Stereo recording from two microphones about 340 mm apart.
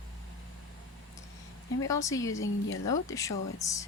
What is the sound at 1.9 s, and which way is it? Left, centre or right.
Speech, centre.